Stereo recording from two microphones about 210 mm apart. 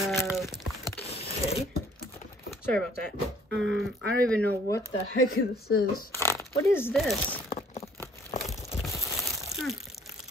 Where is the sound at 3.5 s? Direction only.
60° right (ahead or behind).